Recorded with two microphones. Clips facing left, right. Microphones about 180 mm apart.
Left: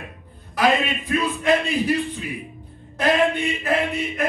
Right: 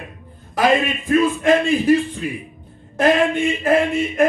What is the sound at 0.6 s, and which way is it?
Speech, 45° right (ahead or behind).